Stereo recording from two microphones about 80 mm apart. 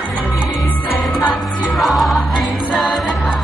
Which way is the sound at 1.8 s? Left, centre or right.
Centre.